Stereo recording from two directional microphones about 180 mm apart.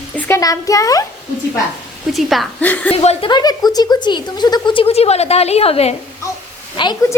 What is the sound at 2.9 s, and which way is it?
Speech, 35° left (ahead or behind).